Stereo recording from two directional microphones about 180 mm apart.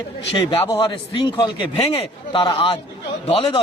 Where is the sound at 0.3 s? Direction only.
25° left (ahead or behind).